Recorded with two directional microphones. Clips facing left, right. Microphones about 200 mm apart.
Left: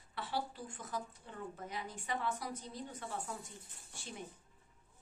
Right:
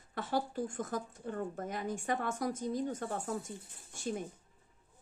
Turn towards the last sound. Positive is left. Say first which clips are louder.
# right 13 dB
turn(degrees=-45)  # may be behind; listen again after turning